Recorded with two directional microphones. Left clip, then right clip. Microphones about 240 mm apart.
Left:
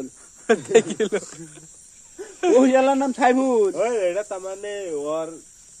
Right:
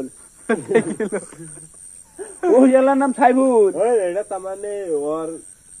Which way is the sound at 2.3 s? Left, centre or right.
Left.